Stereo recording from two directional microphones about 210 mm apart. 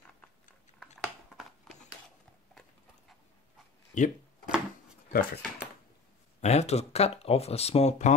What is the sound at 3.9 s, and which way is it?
Speech, 35° left (ahead or behind).